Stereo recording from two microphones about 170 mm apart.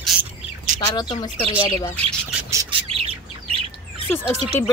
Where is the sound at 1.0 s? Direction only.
25° left (ahead or behind).